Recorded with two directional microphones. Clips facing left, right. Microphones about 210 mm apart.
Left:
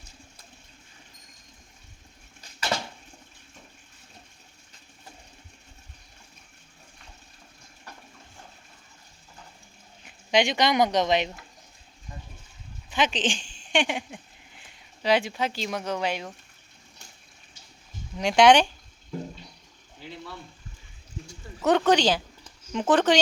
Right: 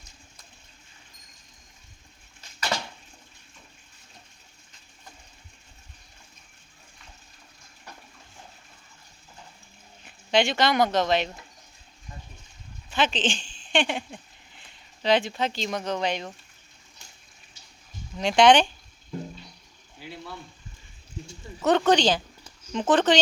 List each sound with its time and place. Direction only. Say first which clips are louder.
10.3 s speech: even; 15° left (ahead or behind)
12.9 s speech: even; 15° left (ahead or behind)
13.6 s a sound: even; 10° left (ahead or behind)
15.0 s speech: right 1 dB; 10° left (ahead or behind)
18.2 s speech: even; 10° left (ahead or behind)
20.0 s boiling: even; 10° right (ahead or behind)
21.6 s speech: even; 10° left (ahead or behind)